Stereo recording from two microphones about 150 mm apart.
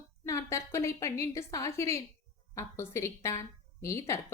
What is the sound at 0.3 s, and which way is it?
A woman's voice, 20° left (ahead or behind).